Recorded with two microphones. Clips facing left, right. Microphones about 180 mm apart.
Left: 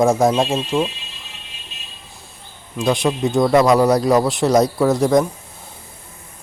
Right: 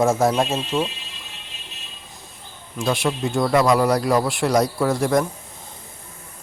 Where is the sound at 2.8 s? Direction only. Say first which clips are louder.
Left 4 dB; 15° left (ahead or behind).